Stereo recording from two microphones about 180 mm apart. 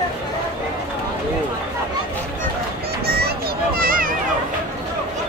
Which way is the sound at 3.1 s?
60° right (ahead or behind).